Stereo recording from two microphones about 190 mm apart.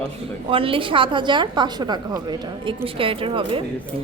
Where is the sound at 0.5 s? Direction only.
30° right (ahead or behind).